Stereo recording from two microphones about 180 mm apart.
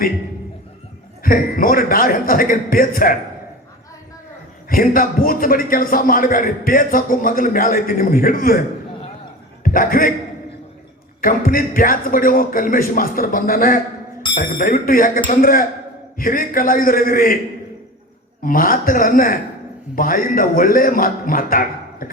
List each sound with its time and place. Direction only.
1.2 s a man's voice: 50° left (ahead or behind)
4.7 s a man's voice: 50° left (ahead or behind)
9.6 s a man's voice: 50° left (ahead or behind)
11.2 s a man's voice: 50° left (ahead or behind)
18.4 s a man's voice: 50° left (ahead or behind)